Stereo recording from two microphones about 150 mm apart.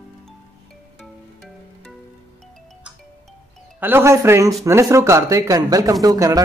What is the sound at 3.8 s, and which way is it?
Speech, 15° right (ahead or behind).